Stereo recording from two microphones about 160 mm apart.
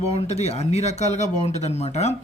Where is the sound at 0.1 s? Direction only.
40° left (ahead or behind).